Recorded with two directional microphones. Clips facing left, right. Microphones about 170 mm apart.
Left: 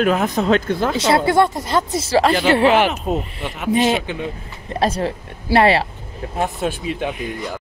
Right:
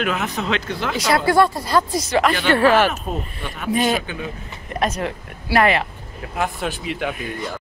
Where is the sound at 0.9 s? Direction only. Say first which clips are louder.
Even; 25° left (ahead or behind).